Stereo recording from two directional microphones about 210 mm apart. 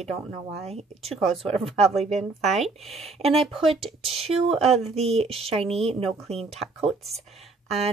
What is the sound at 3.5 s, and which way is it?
Speech, 25° right (ahead or behind).